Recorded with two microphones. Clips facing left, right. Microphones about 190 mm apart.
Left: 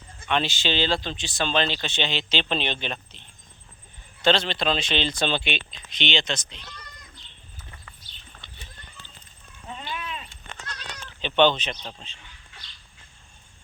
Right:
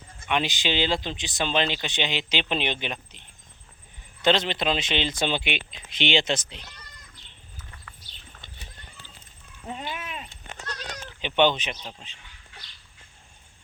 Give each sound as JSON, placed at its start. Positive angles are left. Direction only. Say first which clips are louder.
{"t": 0.3, "sound": "speech", "louder": "left 1 dB", "side_deg": -15}
{"t": 9.8, "sound": "a sound", "louder": "left 4 dB", "side_deg": -15}
{"t": 10.7, "sound": "goat", "louder": "right 5 dB", "side_deg": -40}
{"t": 11.2, "sound": "speech", "louder": "left 2 dB", "side_deg": -15}